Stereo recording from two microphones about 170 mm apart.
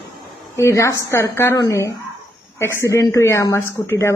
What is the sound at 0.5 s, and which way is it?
Speech, 15° left (ahead or behind).